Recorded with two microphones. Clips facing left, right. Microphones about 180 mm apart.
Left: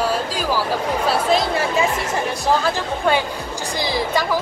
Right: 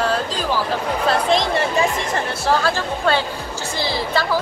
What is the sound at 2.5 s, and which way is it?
Speech, 15° left (ahead or behind).